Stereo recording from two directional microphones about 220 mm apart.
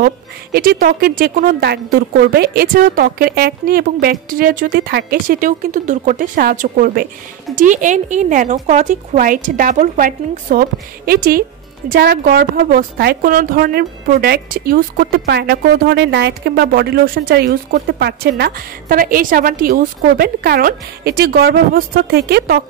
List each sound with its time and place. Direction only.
0.0 s a woman's voice: 40° right (ahead or behind)